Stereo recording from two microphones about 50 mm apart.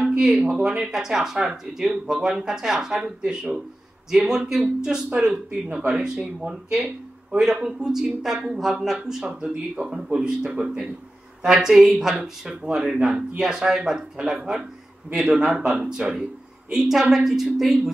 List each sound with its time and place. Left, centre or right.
0.2 s speech: centre
5.7 s speech: right
6.4 s speech: centre
16.7 s speech: centre